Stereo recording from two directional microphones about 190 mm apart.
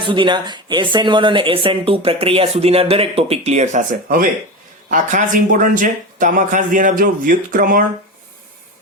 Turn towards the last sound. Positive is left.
turn(degrees=-45)  # may be behind; listen again after turning